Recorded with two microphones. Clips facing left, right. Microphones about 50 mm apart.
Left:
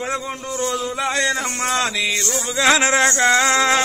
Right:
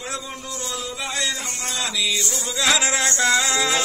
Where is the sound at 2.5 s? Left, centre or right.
Left.